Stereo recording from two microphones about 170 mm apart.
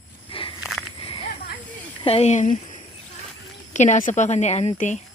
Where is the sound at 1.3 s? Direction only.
60° left (ahead or behind).